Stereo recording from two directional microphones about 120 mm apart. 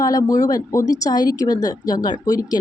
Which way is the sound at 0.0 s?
30° left (ahead or behind).